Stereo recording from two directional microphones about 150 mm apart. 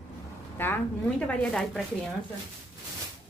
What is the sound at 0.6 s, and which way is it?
A woman's voice, 10° left (ahead or behind).